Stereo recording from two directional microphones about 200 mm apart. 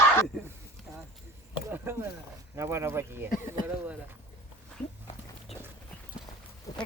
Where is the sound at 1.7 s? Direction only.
10° right (ahead or behind).